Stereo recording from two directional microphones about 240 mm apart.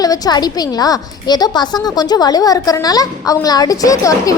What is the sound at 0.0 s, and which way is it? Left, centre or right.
A woman's voice, centre.